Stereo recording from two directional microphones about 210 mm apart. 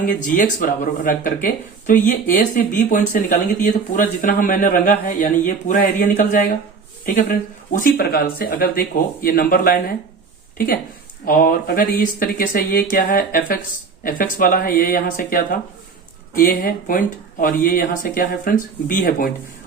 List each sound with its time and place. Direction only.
0.0 s speech: 40° left (ahead or behind)
11.3 s speech: 45° left (ahead or behind)